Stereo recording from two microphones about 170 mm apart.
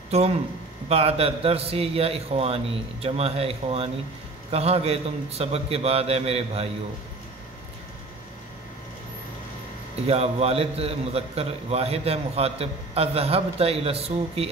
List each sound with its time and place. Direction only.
0.8 s a man's voice: 35° right (ahead or behind)
9.9 s a man's voice: 35° right (ahead or behind)